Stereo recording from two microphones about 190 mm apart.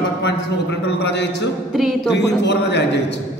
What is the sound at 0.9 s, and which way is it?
A man's voice, 65° left (ahead or behind).